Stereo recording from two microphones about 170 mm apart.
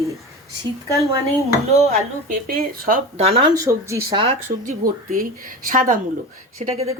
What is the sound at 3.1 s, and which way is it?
Speech, 35° right (ahead or behind).